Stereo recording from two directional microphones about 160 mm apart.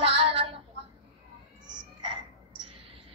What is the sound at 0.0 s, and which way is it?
Child singing, 35° right (ahead or behind).